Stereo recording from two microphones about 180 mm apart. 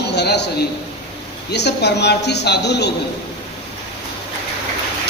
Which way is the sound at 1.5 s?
70° left (ahead or behind).